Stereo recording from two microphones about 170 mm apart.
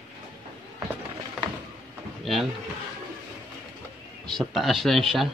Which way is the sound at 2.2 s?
Centre (ahead or behind).